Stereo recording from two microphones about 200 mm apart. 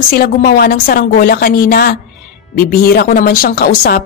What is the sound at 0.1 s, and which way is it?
A woman's voice, 45° left (ahead or behind).